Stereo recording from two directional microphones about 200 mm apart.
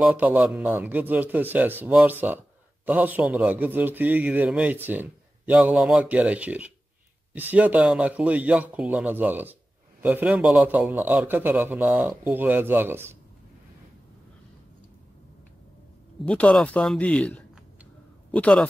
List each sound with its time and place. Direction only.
0.0 s a man's voice: 10° right (ahead or behind)
16.3 s speech: 5° left (ahead or behind)